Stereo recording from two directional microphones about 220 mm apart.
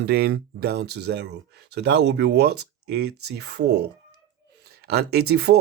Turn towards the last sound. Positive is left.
turn(degrees=-50)  # may be behind; listen again after turning